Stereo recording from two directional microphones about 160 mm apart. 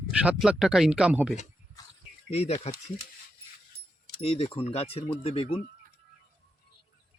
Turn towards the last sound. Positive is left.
turn(degrees=35)  # may be behind; listen again after turning